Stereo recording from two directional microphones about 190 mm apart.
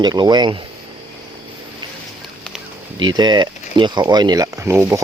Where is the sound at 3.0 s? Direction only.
25° right (ahead or behind).